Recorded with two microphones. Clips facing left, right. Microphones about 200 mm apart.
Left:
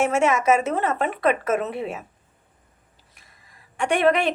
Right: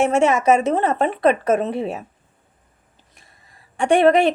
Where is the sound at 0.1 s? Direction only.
35° right (ahead or behind).